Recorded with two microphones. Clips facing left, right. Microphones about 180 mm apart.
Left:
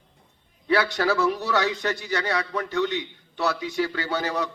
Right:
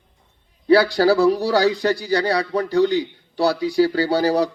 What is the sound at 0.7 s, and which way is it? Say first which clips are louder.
A man's voice: right 8 dB; 35° right (ahead or behind).